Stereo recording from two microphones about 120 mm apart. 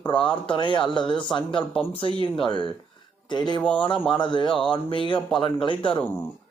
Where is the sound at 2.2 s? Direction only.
40° left (ahead or behind).